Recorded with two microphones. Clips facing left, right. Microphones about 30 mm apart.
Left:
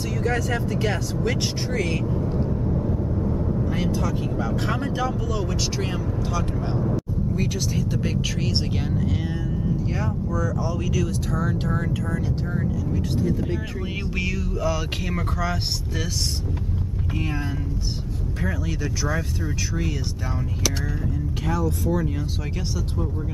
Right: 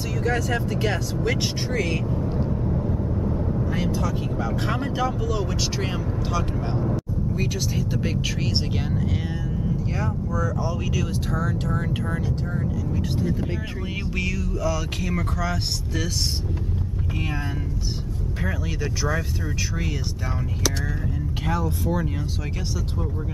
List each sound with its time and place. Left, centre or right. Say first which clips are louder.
0.2 s speech: right 1 dB; centre
11.4 s speech: left 1 dB; centre
14.1 s speech: even; centre
21.5 s speech: left 1 dB; centre